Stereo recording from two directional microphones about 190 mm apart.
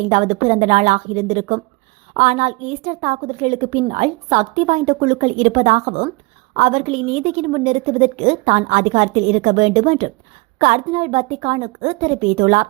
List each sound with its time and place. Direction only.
0.1 s a woman's voice: 35° right (ahead or behind)